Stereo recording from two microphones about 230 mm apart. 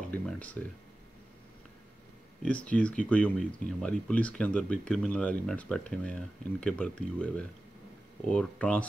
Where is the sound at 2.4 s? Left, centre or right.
Centre.